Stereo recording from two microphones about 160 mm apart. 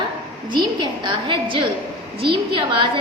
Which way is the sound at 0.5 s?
30° right (ahead or behind).